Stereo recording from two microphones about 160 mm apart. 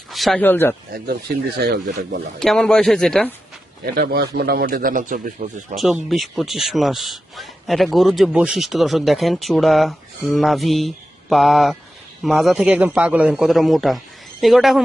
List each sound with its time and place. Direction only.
0.1 s a sound: centre (ahead or behind)
0.4 s speech: 10° left (ahead or behind)
1.0 s speech: 75° right (ahead or behind)
2.4 s speech: 5° left (ahead or behind)
3.9 s speech: 75° right (ahead or behind); by 5.6 s 55° right (ahead or behind)
5.7 s speech: centre (ahead or behind)